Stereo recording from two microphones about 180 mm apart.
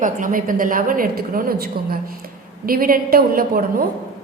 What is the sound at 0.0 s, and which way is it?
A woman's voice, 45° right (ahead or behind).